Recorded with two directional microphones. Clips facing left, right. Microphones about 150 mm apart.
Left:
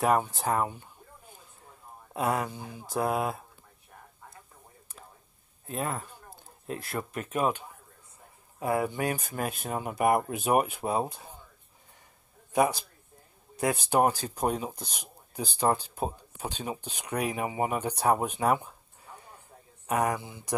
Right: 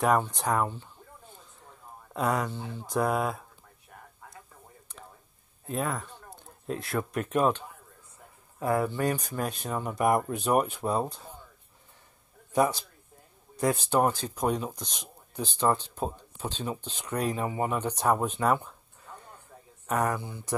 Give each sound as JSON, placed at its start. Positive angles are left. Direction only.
{"t": 0.0, "sound": "speech", "side_deg": 5}
{"t": 2.1, "sound": "speech", "side_deg": 5}
{"t": 5.7, "sound": "speech", "side_deg": 0}
{"t": 12.5, "sound": "speech", "side_deg": 60}
{"t": 14.0, "sound": "speech", "side_deg": 10}
{"t": 18.1, "sound": "a sound", "side_deg": 10}
{"t": 19.9, "sound": "speech", "side_deg": 15}